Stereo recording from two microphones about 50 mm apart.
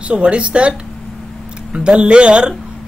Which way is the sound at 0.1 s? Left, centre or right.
Right.